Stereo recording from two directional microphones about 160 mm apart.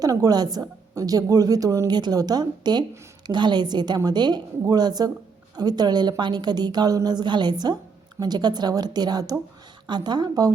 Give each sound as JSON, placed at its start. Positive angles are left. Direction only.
{"t": 0.0, "sound": "a woman's voice", "side_deg": -20}